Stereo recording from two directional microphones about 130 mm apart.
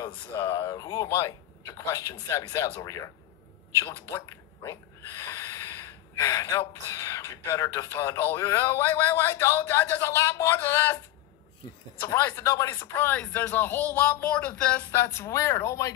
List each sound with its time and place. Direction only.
0.0 s speech: 25° left (ahead or behind)
4.6 s speech: 25° left (ahead or behind)
12.0 s speech: 20° left (ahead or behind)